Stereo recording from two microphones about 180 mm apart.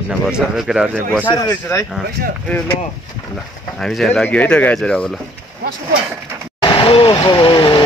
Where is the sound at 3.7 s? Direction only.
Centre (ahead or behind).